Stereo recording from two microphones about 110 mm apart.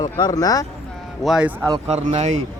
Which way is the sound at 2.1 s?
90° right.